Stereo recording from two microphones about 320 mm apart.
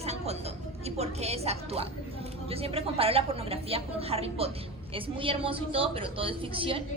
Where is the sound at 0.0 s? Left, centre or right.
Centre.